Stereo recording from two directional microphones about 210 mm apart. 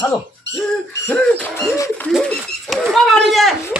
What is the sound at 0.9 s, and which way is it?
Speech, 10° left (ahead or behind).